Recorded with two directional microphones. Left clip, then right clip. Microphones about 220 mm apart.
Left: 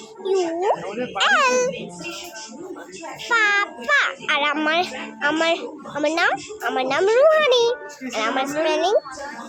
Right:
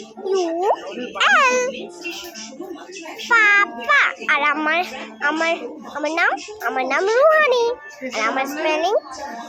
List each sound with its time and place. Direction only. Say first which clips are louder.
0.3 s a sound: right 1 dB; centre (ahead or behind)
1.2 s a child's voice: right 2 dB; centre (ahead or behind)
3.2 s a child's voice: right 4 dB; centre (ahead or behind)